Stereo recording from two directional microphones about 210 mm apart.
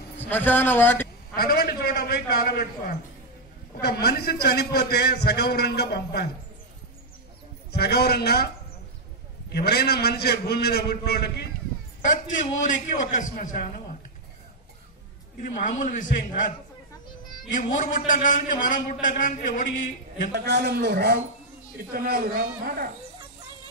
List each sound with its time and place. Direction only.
0.3 s a man's voice: 10° left (ahead or behind)
1.3 s a man's voice: 45° left (ahead or behind)
7.7 s a man's voice: 50° left (ahead or behind)
9.5 s a man's voice: 50° left (ahead or behind)
12.6 s a man's voice: 40° left (ahead or behind)
15.4 s a man's voice: 40° left (ahead or behind)
17.6 s a man's voice: 40° left (ahead or behind)
20.3 s speech: 50° right (ahead or behind)